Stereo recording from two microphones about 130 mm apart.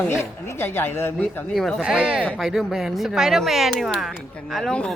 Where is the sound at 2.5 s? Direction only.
Centre (ahead or behind).